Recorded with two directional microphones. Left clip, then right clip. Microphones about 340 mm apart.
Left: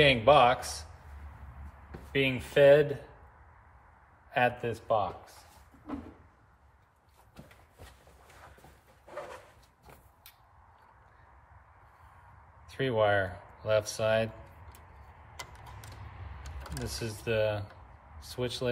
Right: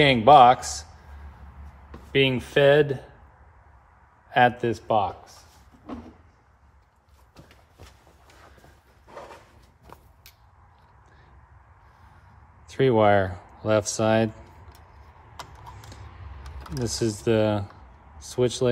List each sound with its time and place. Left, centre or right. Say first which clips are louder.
0.0 s speech: right 8 dB; centre
2.1 s speech: right 5 dB; right
4.3 s speech: right 8 dB; right
12.6 s speech: right 8 dB; centre
16.7 s speech: right 11 dB; centre